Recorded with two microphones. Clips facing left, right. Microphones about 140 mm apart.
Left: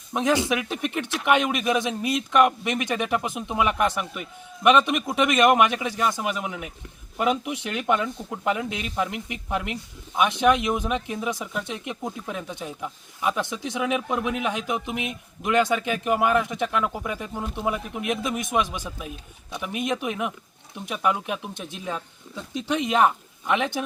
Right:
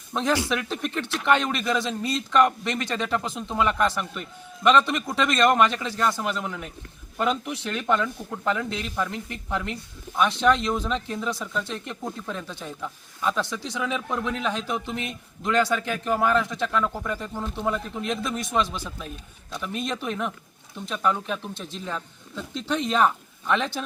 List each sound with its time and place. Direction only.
0.1 s speech: 15° left (ahead or behind)